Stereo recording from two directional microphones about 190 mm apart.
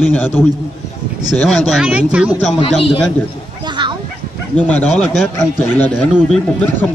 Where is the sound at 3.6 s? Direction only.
25° right (ahead or behind).